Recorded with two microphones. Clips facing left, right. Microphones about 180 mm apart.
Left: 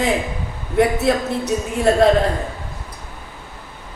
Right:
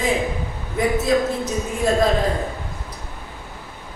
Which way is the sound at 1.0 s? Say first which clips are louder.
Even; 65° left (ahead or behind).